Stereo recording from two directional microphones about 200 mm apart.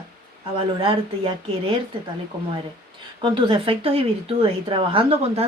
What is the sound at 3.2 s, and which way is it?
Speech, 25° right (ahead or behind).